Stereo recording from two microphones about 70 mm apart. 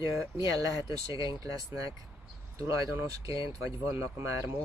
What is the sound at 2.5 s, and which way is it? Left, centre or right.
Speech, right.